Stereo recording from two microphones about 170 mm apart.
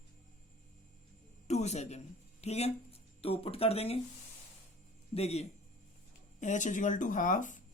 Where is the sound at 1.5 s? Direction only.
40° left (ahead or behind).